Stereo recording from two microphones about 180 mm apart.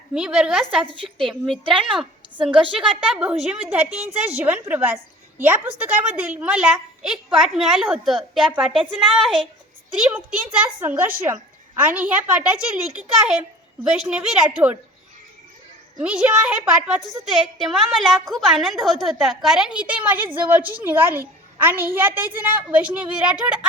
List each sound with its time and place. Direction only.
0.1 s a woman's voice: 5° right (ahead or behind)
1.6 s speech: 30° right (ahead or behind)
2.7 s a woman's voice: 5° right (ahead or behind)
16.0 s a woman's voice: 5° right (ahead or behind)